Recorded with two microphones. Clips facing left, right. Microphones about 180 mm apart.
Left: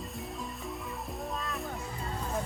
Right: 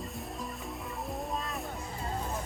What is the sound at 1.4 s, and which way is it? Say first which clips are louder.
Music: left 1 dB; centre (ahead or behind).